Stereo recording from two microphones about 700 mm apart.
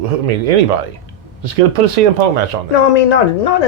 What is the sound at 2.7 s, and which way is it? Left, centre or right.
Speech, left.